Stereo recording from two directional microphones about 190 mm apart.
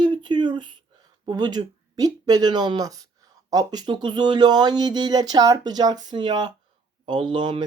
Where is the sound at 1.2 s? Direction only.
20° right (ahead or behind).